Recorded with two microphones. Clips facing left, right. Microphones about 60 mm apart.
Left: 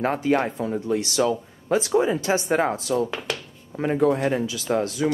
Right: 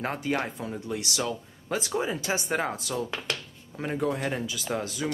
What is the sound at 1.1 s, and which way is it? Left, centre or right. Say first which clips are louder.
A man's voice: left 9 dB; centre.